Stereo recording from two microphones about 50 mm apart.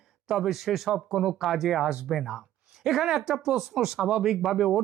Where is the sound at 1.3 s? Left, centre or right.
Centre.